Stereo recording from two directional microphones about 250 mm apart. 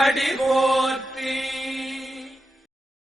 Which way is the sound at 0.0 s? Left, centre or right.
Centre.